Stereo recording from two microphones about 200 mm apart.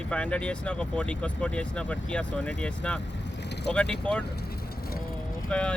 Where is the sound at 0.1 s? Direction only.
5° left (ahead or behind).